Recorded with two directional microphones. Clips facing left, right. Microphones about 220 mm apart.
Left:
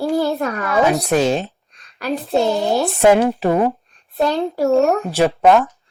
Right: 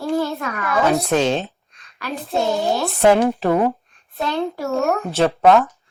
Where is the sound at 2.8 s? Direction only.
15° left (ahead or behind).